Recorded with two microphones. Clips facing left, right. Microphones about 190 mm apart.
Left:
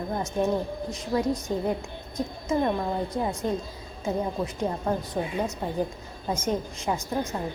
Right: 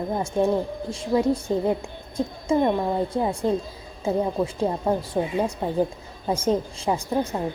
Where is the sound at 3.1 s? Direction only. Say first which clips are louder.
Right 4 dB; 30° right (ahead or behind).